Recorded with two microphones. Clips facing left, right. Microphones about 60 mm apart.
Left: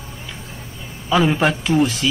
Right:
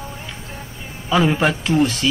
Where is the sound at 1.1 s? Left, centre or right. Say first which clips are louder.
Even; centre.